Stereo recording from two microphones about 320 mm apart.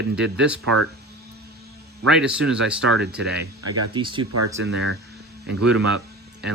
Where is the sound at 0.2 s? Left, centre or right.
Centre.